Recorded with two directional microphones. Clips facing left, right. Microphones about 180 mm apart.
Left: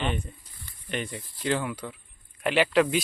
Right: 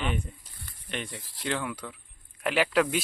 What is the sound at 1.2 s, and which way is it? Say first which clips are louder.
Speech: left 2 dB; 90° right.